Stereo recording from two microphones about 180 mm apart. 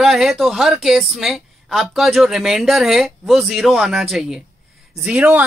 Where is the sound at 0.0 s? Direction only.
Centre (ahead or behind).